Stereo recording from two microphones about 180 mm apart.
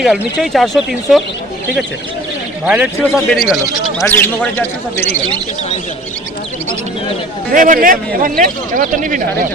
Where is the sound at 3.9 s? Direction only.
10° left (ahead or behind).